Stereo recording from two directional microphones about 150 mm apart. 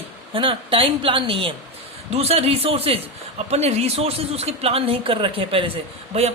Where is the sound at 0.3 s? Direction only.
35° right (ahead or behind).